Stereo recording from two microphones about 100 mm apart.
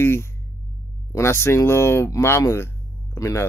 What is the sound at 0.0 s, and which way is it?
Speech, 25° left (ahead or behind).